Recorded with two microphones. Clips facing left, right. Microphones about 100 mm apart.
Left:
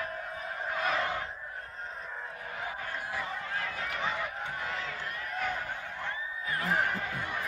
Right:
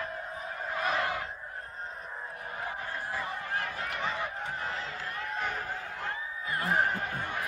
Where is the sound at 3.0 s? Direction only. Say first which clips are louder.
Right 2 dB; 30° right (ahead or behind).